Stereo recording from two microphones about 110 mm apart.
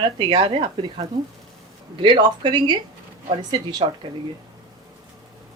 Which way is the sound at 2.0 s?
40° right (ahead or behind).